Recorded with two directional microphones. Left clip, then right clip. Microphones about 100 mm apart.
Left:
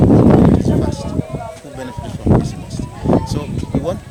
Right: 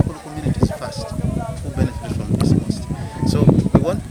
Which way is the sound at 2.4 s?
5° left (ahead or behind).